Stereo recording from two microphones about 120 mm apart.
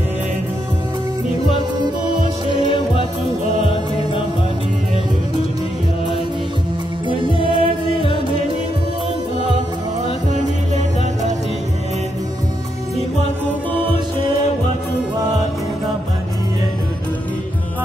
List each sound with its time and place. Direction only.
1.8 s music: 40° right (ahead or behind)
3.6 s music: 50° left (ahead or behind)
7.1 s music: 45° right (ahead or behind)